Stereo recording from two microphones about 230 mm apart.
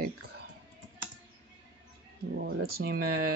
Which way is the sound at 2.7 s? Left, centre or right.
Right.